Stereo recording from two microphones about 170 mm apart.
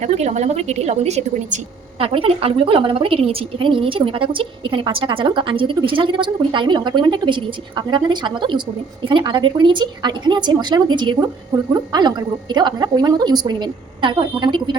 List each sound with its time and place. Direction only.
0.0 s a woman's voice: 40° right (ahead or behind); by 14.8 s 25° right (ahead or behind)